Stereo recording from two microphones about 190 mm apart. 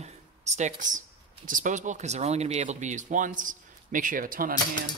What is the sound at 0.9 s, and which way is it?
Speech, 45° right (ahead or behind).